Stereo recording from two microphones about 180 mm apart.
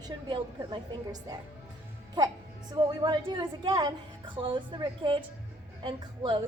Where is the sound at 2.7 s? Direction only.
25° right (ahead or behind).